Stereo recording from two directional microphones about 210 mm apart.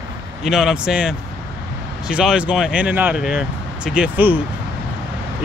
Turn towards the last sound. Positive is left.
turn(degrees=-10)  # may be behind; listen again after turning